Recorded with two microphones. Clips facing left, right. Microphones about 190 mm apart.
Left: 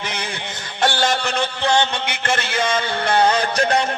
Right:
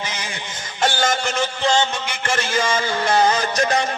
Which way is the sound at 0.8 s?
60° left (ahead or behind).